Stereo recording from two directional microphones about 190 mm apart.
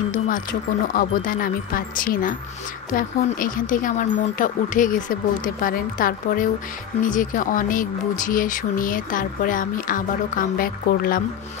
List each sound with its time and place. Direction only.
0.1 s speech: 45° left (ahead or behind)